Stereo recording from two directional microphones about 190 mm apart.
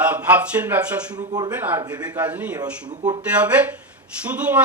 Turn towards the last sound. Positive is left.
turn(degrees=-5)  # may be behind; listen again after turning